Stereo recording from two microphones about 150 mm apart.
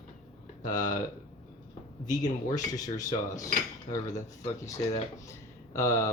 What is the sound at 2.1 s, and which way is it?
Speech, 25° left (ahead or behind).